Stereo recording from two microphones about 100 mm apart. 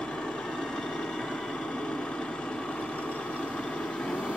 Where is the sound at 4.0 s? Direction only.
10° left (ahead or behind).